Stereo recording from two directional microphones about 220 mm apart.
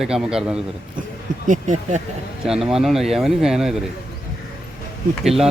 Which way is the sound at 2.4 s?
Centre (ahead or behind).